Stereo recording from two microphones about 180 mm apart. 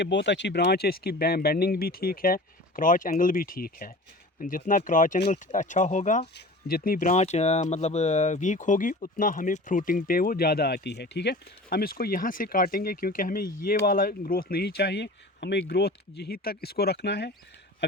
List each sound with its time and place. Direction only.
0.0 s speech: 75° left (ahead or behind); by 6.2 s 45° left (ahead or behind)
6.3 s speech: 55° left (ahead or behind)